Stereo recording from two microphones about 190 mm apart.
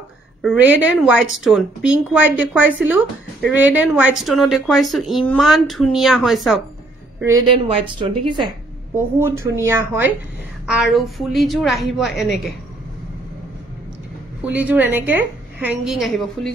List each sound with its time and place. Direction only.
0.4 s a woman's voice: 5° right (ahead or behind)
8.0 s speech: 25° right (ahead or behind)
8.9 s a woman's voice: 15° right (ahead or behind)
10.7 s speech: centre (ahead or behind)
14.4 s a woman's voice: 10° right (ahead or behind)